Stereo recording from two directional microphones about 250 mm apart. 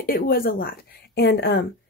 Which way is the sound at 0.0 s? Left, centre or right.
Left.